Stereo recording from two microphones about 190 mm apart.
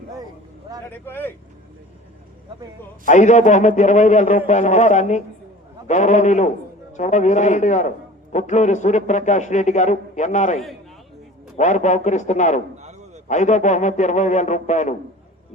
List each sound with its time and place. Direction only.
0.9 s speech: 10° left (ahead or behind)
3.1 s a man's voice: 40° left (ahead or behind)
12.8 s a sound: 35° right (ahead or behind)
13.2 s a man's voice: 40° left (ahead or behind)